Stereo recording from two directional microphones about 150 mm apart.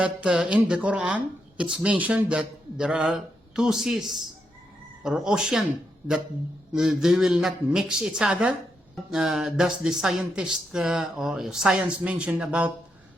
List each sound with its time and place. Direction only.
0.0 s speech: 5° right (ahead or behind)
6.7 s speech: centre (ahead or behind)